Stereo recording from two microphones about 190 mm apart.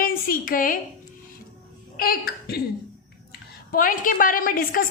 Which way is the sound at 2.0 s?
55° left (ahead or behind).